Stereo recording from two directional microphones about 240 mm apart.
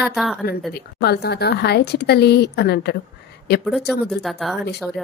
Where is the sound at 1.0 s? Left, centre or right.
Left.